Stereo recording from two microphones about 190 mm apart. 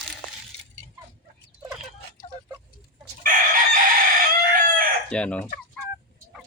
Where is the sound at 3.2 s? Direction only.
45° right (ahead or behind).